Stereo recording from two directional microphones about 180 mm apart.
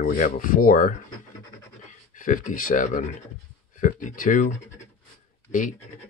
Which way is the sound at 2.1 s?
45° left (ahead or behind).